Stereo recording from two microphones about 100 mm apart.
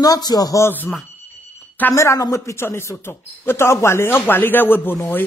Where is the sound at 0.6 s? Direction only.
20° left (ahead or behind).